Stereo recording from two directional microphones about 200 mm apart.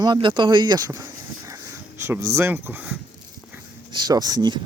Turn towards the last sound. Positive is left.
turn(degrees=-20)  # may be behind; listen again after turning